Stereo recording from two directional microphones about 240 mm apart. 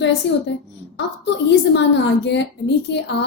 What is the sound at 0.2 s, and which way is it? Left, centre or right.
A woman's voice, left.